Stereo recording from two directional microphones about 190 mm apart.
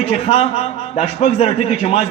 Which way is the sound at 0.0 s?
30° left (ahead or behind).